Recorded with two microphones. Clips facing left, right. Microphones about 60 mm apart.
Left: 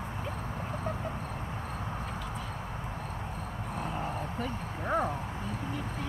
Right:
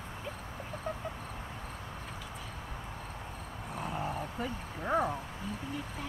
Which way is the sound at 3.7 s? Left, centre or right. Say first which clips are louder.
Left 1 dB; centre.